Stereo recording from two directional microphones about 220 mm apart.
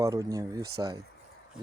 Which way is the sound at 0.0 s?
15° right (ahead or behind).